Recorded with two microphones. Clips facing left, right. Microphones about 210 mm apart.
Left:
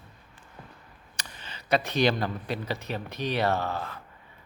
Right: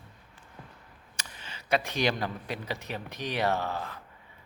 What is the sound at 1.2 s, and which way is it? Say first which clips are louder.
A man's voice: left 1 dB; 10° right (ahead or behind).